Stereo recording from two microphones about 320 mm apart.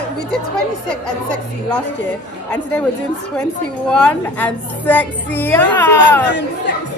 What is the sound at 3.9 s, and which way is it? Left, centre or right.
A woman's voice, centre.